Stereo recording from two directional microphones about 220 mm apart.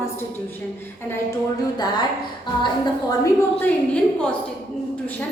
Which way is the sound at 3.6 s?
5° left (ahead or behind).